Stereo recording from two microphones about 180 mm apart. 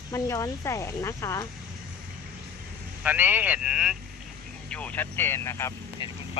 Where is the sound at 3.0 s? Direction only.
10° right (ahead or behind).